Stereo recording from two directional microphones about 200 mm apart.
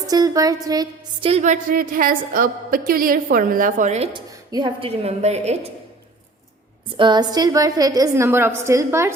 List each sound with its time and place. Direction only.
0.1 s a woman's voice: 20° right (ahead or behind)
1.3 s a woman's voice: 35° right (ahead or behind)
6.9 s a woman's voice: 25° right (ahead or behind)